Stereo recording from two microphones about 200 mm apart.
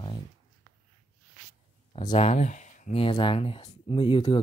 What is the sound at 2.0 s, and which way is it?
Speech, 30° left (ahead or behind).